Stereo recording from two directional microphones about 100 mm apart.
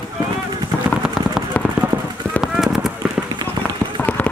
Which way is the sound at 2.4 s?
5° right (ahead or behind).